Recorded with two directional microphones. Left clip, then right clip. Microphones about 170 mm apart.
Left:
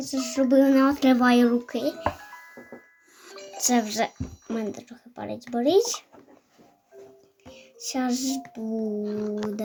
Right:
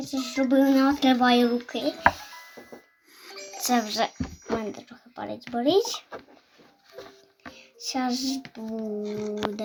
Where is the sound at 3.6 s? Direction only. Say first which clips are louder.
Even; 30° left (ahead or behind).